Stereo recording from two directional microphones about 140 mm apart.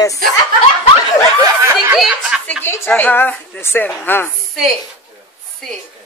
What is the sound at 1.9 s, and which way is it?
Speech, centre (ahead or behind).